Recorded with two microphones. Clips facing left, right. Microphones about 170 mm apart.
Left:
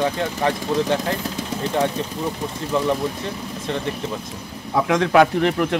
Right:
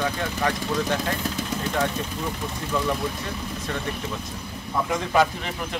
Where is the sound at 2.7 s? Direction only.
25° left (ahead or behind).